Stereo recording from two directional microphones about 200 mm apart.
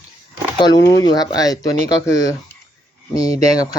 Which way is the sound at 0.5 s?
20° left (ahead or behind).